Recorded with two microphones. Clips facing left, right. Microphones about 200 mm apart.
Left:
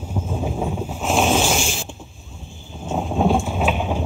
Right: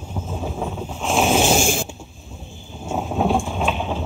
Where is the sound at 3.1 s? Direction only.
Centre (ahead or behind).